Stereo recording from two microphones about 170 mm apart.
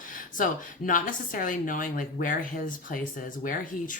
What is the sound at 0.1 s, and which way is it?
A woman's voice, 50° left (ahead or behind).